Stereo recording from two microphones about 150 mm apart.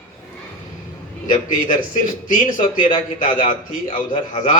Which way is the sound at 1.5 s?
60° left (ahead or behind).